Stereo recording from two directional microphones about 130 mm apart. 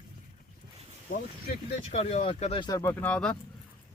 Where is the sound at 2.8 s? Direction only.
10° left (ahead or behind).